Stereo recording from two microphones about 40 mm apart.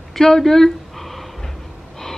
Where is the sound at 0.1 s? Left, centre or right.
Centre.